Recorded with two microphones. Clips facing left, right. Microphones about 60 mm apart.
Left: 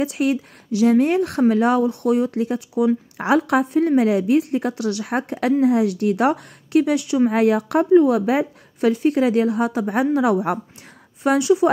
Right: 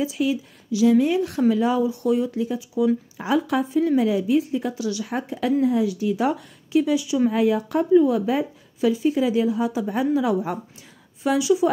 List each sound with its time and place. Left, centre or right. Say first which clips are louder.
0.0 s a woman's voice: left 3 dB; left
7.3 s speech: left 3 dB; left
7.8 s a woman's voice: left 3 dB; left
11.2 s speech: left 3 dB; left